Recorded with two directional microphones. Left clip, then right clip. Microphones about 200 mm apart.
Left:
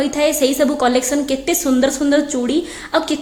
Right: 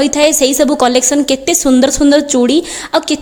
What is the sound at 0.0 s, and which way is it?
A woman's voice, 40° right (ahead or behind).